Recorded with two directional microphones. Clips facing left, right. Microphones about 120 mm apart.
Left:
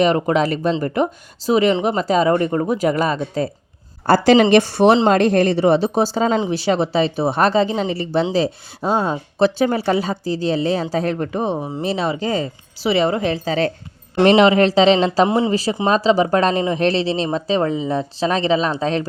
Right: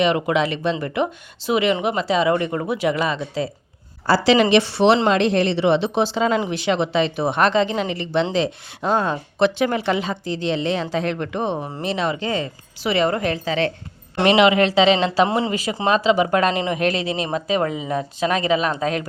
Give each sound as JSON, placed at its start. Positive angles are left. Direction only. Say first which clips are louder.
{"t": 0.0, "sound": "speech", "louder": "left 3 dB", "side_deg": 40}
{"t": 8.8, "sound": "speech", "louder": "left 1 dB", "side_deg": 10}
{"t": 9.4, "sound": "speech", "louder": "left 2 dB", "side_deg": 35}
{"t": 11.4, "sound": "speech", "louder": "left 2 dB", "side_deg": 5}
{"t": 11.8, "sound": "speech", "louder": "left 2 dB", "side_deg": 35}
{"t": 15.3, "sound": "speech", "louder": "left 4 dB", "side_deg": 20}
{"t": 15.9, "sound": "speech", "louder": "left 1 dB", "side_deg": 35}